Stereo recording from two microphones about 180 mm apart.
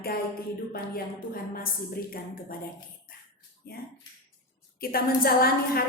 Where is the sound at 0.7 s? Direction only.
55° left (ahead or behind).